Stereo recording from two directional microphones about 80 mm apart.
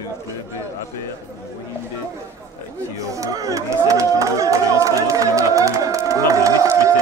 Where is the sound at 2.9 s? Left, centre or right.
Right.